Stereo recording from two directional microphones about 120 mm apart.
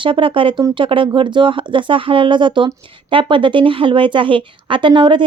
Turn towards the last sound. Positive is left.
turn(degrees=-40)  # may be behind; listen again after turning